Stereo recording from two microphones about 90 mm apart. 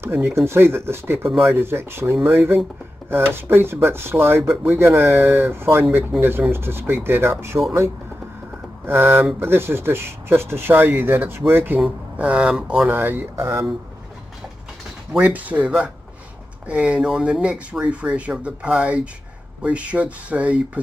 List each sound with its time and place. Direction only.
0.0 s speech: 30° right (ahead or behind)
8.8 s speech: 25° right (ahead or behind)
12.2 s speech: 15° right (ahead or behind)
15.1 s speech: 15° right (ahead or behind)